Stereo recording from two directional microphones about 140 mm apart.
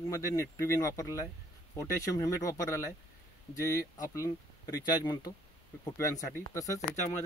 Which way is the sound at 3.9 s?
20° left (ahead or behind).